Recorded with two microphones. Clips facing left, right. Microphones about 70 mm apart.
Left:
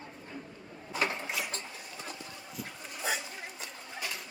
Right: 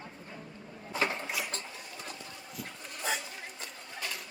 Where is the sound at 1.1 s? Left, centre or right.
Centre.